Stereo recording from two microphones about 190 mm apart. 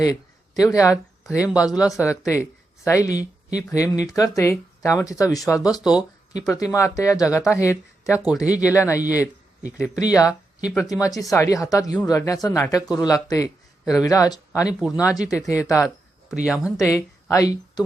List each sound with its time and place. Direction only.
0.0 s speech: 20° left (ahead or behind)
1.2 s speech: 5° right (ahead or behind)
2.0 s speech: 15° left (ahead or behind)
8.4 s speech: 5° right (ahead or behind)
8.7 s speech: 15° left (ahead or behind)
14.8 s speech: 5° right (ahead or behind)
15.0 s speech: 20° left (ahead or behind)
16.3 s speech: 5° right (ahead or behind)
16.9 s speech: 15° left (ahead or behind)